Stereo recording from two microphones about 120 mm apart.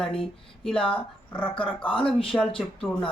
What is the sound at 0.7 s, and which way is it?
Speech, 45° left (ahead or behind).